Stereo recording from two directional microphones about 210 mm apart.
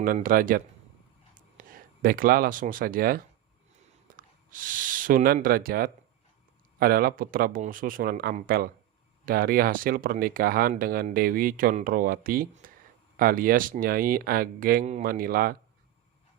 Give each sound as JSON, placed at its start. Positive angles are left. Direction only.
{"t": 0.0, "sound": "speech", "side_deg": -40}